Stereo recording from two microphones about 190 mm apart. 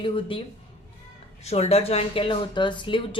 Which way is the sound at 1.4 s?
35° left (ahead or behind).